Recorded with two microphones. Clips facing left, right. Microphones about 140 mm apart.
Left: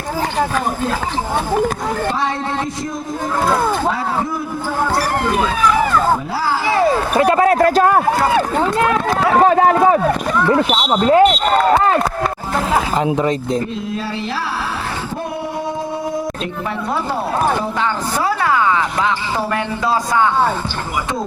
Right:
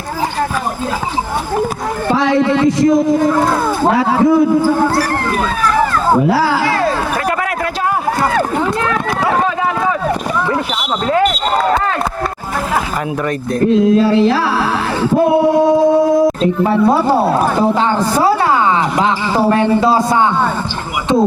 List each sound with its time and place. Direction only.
2.1 s speech: 90° right
6.2 s speech: 80° right
6.7 s a sound: 20° left (ahead or behind)
7.8 s a sound: 50° left (ahead or behind)
9.4 s a sound: 45° left (ahead or behind)
10.7 s speech: 25° left (ahead or behind)
13.1 s speech: 20° left (ahead or behind)
14.1 s music: 90° right
15.2 s speech: 90° right
16.4 s a woman's voice: 35° right (ahead or behind)